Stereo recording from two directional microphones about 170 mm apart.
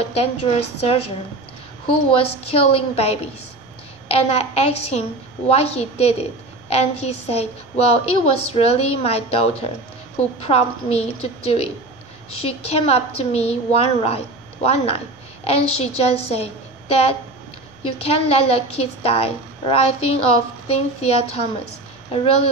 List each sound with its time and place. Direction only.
0.0 s a woman's voice: 35° left (ahead or behind)
2.0 s a woman's voice: 35° left (ahead or behind)